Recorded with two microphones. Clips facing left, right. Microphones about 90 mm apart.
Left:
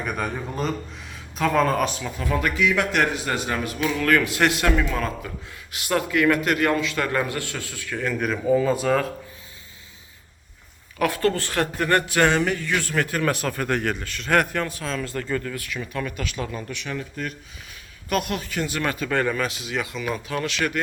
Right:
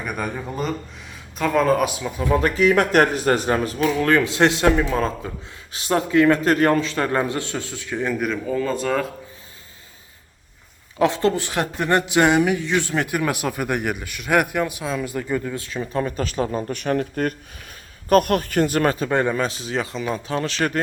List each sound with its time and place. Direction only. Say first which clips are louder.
0.0 s speech: even; 5° right (ahead or behind)
2.2 s a man's voice: right 5 dB; 25° right (ahead or behind)
2.6 s a man's voice: right 6 dB; 45° right (ahead or behind); by 8.1 s 20° right (ahead or behind)
8.1 s speech: even; centre (ahead or behind)
8.4 s speech: left 6 dB; 10° left (ahead or behind)
10.9 s speech: right 3 dB; 25° right (ahead or behind)
19.1 s a man's voice: right 3 dB; 25° right (ahead or behind)